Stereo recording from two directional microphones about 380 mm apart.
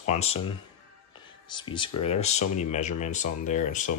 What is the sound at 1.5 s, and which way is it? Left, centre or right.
Speech, centre.